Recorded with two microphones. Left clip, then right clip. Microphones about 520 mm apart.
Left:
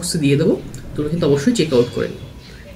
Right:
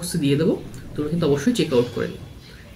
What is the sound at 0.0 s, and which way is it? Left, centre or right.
Speech, right.